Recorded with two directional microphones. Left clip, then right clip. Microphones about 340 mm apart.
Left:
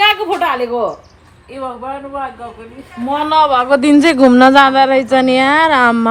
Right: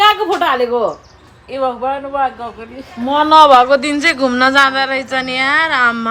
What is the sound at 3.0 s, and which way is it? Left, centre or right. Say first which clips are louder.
Speech: right 4 dB; centre.